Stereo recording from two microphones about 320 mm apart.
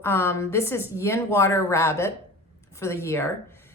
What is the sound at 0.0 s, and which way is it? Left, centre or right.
A woman's voice, centre.